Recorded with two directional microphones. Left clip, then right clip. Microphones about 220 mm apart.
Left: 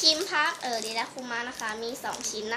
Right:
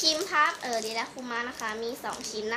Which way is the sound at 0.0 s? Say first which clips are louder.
Even; 5° left (ahead or behind).